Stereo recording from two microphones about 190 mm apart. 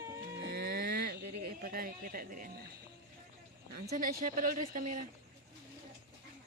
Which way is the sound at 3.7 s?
50° right (ahead or behind).